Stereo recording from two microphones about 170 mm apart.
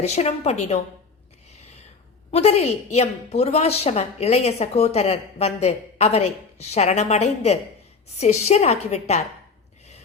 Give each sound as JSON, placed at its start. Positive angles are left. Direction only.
{"t": 0.0, "sound": "a woman's voice", "side_deg": 40}
{"t": 2.3, "sound": "a woman's voice", "side_deg": 40}